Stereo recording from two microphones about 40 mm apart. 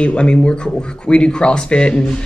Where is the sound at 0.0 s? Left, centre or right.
Left.